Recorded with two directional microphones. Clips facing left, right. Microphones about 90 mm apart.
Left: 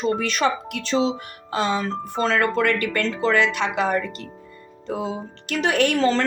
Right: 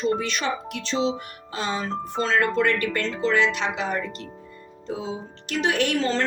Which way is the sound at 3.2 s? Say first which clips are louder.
Left 1 dB; 55° left (ahead or behind).